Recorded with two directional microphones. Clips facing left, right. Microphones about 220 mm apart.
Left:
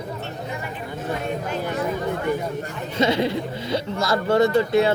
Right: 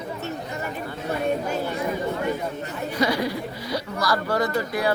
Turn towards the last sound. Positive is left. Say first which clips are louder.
# left 7 dB
turn(degrees=25)  # may be behind; listen again after turning